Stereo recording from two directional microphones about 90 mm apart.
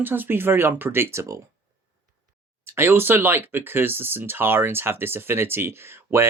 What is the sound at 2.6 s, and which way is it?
Speech, 25° right (ahead or behind).